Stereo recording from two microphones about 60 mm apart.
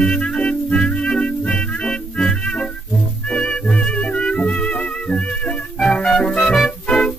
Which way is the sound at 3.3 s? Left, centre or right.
Centre.